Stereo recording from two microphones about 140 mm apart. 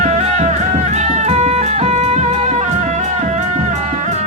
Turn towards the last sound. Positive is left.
turn(degrees=-55)  # may be behind; listen again after turning